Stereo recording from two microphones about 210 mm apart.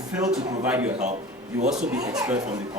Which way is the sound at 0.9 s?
35° right (ahead or behind).